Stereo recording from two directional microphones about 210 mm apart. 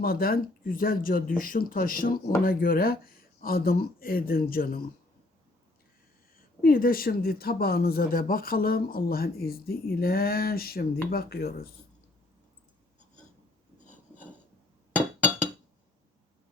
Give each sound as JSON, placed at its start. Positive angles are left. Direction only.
{"t": 0.0, "sound": "speech", "side_deg": 45}
{"t": 6.3, "sound": "speech", "side_deg": 45}